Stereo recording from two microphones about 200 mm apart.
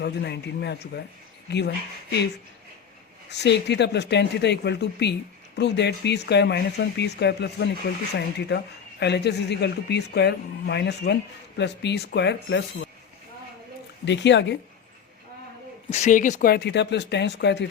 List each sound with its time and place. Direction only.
0.0 s speech: 55° left (ahead or behind)
3.2 s speech: 60° left (ahead or behind)
14.0 s speech: 60° left (ahead or behind)
15.9 s speech: 35° left (ahead or behind); by 17.7 s 60° left (ahead or behind)